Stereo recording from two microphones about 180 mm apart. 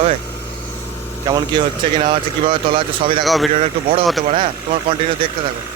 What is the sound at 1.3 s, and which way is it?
Speech, 25° right (ahead or behind).